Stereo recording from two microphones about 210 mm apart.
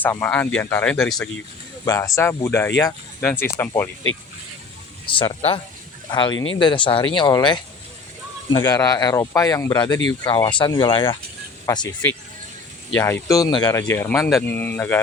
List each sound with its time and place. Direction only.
0.0 s speech: 10° left (ahead or behind)
1.8 s speech: 15° left (ahead or behind)
5.0 s speech: 25° left (ahead or behind)
6.3 s speech: 70° left (ahead or behind)
6.6 s speech: 20° left (ahead or behind)
13.0 s speech: 10° left (ahead or behind)